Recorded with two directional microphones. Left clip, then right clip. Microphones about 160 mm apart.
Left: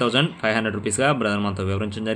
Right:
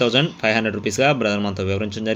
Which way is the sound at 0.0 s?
15° right (ahead or behind).